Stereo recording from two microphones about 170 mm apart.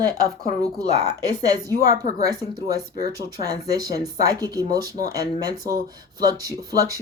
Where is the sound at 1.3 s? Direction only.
20° right (ahead or behind).